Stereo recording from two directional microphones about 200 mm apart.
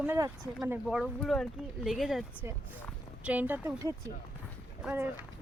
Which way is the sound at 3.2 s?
5° right (ahead or behind).